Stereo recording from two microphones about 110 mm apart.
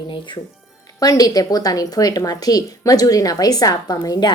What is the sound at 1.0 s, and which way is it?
A woman's voice, 35° left (ahead or behind).